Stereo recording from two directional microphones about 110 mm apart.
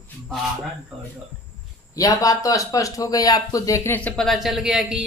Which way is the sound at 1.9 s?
30° left (ahead or behind).